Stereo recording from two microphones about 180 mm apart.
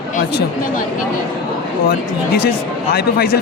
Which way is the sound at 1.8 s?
60° left (ahead or behind).